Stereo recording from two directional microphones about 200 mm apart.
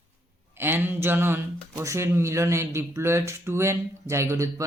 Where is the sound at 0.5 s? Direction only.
10° right (ahead or behind).